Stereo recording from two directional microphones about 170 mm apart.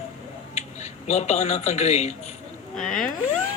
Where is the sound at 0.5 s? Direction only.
40° left (ahead or behind).